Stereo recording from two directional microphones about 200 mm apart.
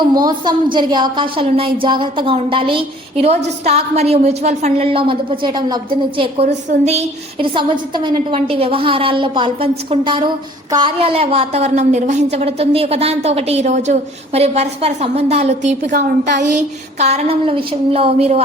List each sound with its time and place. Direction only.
0.3 s a woman's voice: 25° right (ahead or behind)
15.9 s a woman's voice: 45° right (ahead or behind)